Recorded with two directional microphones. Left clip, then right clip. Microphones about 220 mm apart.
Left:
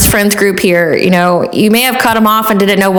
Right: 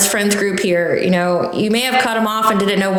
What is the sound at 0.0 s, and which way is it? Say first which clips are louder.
Speech: left 6 dB; 35° left (ahead or behind).